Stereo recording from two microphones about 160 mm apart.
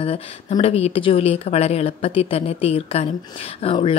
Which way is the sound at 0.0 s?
35° left (ahead or behind).